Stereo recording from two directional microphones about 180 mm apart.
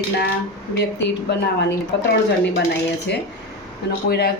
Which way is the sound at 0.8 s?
70° left (ahead or behind).